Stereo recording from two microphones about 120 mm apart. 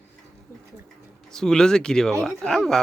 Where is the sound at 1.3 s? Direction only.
5° left (ahead or behind).